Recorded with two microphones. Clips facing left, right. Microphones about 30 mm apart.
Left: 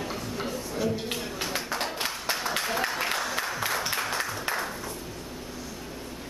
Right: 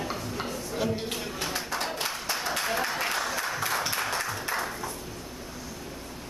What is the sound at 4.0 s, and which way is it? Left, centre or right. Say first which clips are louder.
Music: even; centre.